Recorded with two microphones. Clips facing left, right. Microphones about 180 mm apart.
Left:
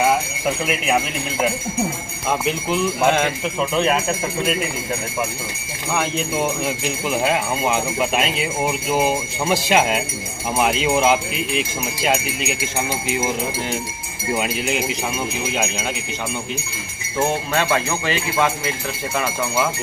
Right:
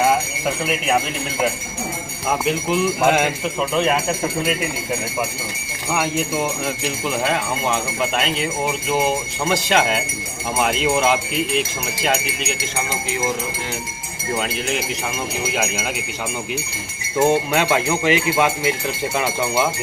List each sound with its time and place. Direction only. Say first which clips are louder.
0.4 s a man's voice: left 1 dB; centre (ahead or behind)
2.4 s a man's voice: right 3 dB; centre (ahead or behind)
5.9 s a man's voice: right 1 dB; 5° right (ahead or behind)
14.3 s speech: left 1 dB; 10° left (ahead or behind)
15.5 s a man's voice: right 1 dB; 5° right (ahead or behind)
17.2 s speech: right 4 dB; 15° right (ahead or behind)